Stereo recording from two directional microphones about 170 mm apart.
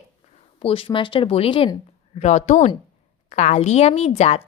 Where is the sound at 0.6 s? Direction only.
30° left (ahead or behind).